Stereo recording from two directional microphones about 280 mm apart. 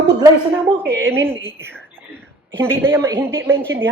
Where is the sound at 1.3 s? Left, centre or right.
Centre.